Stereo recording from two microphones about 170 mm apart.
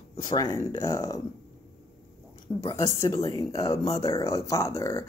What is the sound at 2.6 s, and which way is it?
Speech, 20° left (ahead or behind).